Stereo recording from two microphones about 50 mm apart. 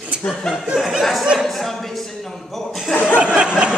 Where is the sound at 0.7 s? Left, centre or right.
Centre.